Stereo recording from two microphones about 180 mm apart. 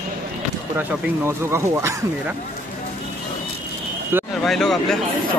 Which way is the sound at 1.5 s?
15° right (ahead or behind).